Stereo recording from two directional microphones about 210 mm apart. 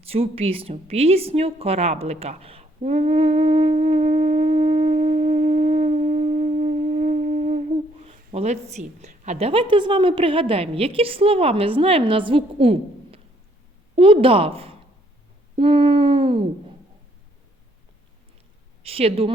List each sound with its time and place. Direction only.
0.1 s speech: 30° right (ahead or behind)
13.9 s a sound: 25° right (ahead or behind)
18.8 s speech: 25° right (ahead or behind)